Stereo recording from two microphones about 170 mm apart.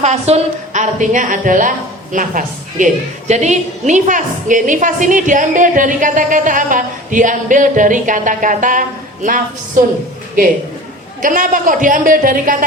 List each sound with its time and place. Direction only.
0.0 s a woman's voice: 40° right (ahead or behind)
11.2 s a woman's voice: 50° right (ahead or behind)